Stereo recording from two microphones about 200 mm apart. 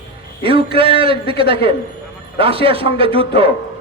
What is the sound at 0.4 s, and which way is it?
A man's voice, 25° right (ahead or behind).